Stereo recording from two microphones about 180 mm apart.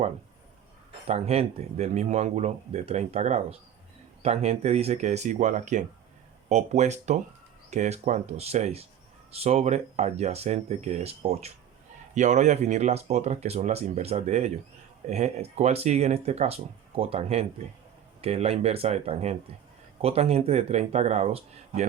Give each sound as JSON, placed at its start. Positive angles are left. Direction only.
{"t": 1.0, "sound": "speech", "side_deg": -35}